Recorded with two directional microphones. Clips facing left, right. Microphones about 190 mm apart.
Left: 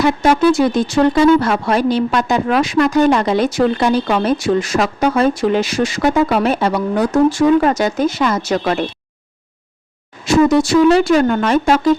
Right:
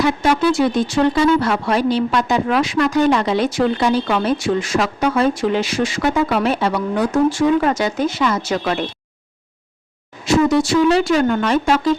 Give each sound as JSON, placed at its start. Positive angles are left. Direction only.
{"t": 0.0, "sound": "speech", "side_deg": 45}
{"t": 10.2, "sound": "speech", "side_deg": 45}